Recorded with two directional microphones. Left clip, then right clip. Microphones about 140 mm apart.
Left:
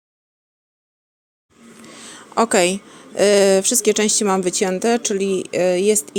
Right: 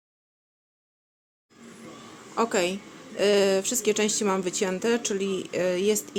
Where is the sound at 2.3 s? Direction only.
70° left (ahead or behind).